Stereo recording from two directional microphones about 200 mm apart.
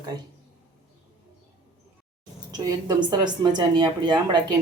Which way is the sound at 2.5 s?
20° right (ahead or behind).